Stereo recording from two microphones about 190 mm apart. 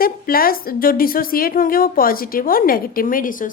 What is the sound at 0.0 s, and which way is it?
A woman's voice, 50° left (ahead or behind).